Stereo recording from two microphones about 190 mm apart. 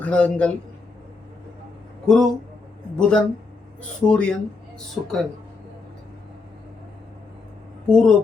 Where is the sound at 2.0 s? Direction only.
Centre (ahead or behind).